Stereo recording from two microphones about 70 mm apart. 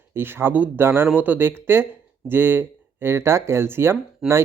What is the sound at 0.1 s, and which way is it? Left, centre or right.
Speech, right.